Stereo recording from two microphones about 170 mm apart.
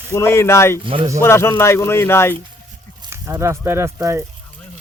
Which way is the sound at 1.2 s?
15° left (ahead or behind).